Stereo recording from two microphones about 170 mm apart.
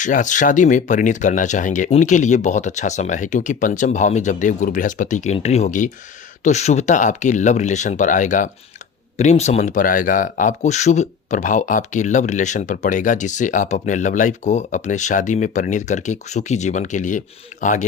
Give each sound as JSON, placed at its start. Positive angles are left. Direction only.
{"t": 0.0, "sound": "speech", "side_deg": 50}